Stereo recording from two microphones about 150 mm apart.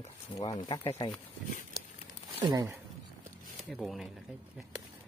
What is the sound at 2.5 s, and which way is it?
Speech, 20° right (ahead or behind).